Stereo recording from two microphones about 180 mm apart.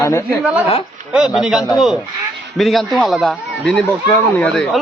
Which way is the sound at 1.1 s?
Centre (ahead or behind).